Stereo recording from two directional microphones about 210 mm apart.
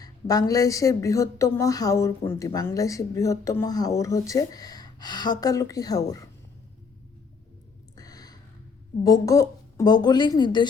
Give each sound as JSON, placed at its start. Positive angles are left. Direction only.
{"t": 0.0, "sound": "a woman's voice", "side_deg": 15}
{"t": 7.9, "sound": "a sound", "side_deg": 15}
{"t": 9.0, "sound": "a woman's voice", "side_deg": 15}